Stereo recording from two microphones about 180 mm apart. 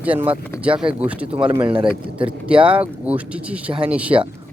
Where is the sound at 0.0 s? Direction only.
10° right (ahead or behind).